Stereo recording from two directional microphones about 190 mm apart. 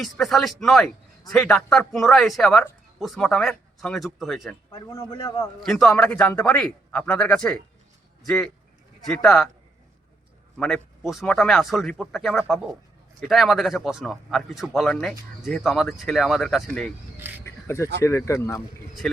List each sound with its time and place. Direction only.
0.0 s speech: centre (ahead or behind)
4.7 s a man's voice: 20° left (ahead or behind)
5.6 s speech: centre (ahead or behind)
10.6 s speech: centre (ahead or behind)
17.2 s speech: 10° right (ahead or behind)
17.4 s a sound: 15° left (ahead or behind)
18.0 s speech: 15° left (ahead or behind)